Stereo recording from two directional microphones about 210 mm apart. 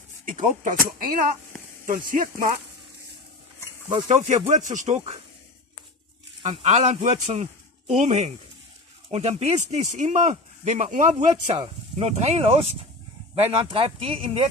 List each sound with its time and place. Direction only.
0.2 s speech: 40° right (ahead or behind)
4.1 s speech: 35° right (ahead or behind)
6.4 s speech: 30° right (ahead or behind)